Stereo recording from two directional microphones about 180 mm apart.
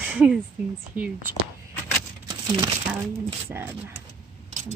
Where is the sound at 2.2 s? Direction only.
25° right (ahead or behind).